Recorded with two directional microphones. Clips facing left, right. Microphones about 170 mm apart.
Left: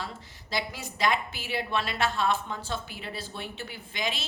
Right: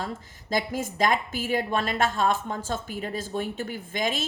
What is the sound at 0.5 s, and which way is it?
A woman's voice, 45° right (ahead or behind).